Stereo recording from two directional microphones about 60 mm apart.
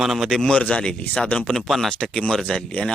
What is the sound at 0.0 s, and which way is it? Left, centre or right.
Speech, centre.